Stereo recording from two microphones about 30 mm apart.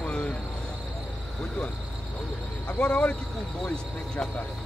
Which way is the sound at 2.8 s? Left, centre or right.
Left.